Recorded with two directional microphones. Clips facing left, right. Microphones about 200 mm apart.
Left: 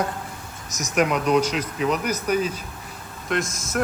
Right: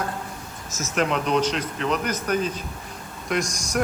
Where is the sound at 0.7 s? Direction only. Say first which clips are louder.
Left 2 dB; 15° left (ahead or behind).